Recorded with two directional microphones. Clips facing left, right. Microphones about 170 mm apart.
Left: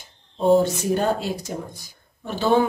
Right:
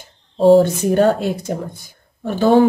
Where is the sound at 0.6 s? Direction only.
55° right (ahead or behind).